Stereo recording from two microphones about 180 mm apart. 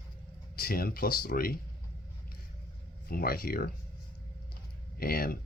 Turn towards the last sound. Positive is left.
turn(degrees=55)  # may be behind; listen again after turning